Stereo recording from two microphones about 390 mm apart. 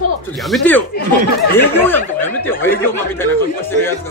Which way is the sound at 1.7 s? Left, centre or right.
Centre.